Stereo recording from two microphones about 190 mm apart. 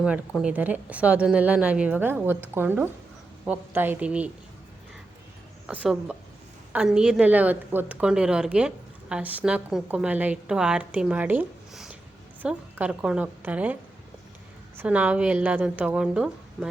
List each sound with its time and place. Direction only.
0.0 s a woman's voice: 5° right (ahead or behind)
5.6 s a woman's voice: 5° right (ahead or behind)
14.8 s a woman's voice: 5° right (ahead or behind)